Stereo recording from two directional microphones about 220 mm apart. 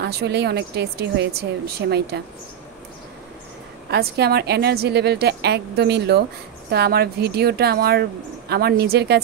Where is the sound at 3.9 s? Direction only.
50° right (ahead or behind).